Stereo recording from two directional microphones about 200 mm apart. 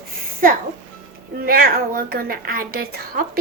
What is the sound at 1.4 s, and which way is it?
A woman's voice, 50° right (ahead or behind).